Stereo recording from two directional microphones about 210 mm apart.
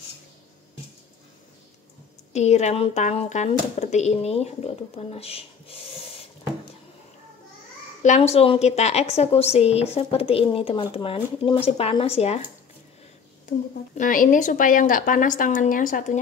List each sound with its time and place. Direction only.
2.3 s speech: 30° left (ahead or behind)
8.0 s a woman's voice: 35° left (ahead or behind)
13.9 s a woman's voice: 40° left (ahead or behind)